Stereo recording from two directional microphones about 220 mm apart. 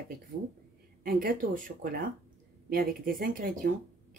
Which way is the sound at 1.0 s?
40° right (ahead or behind).